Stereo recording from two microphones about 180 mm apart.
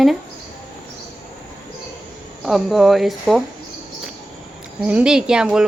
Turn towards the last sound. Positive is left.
turn(degrees=-5)  # may be behind; listen again after turning